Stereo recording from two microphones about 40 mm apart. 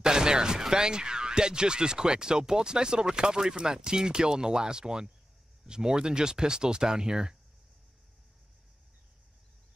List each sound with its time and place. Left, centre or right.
0.0 s speech: centre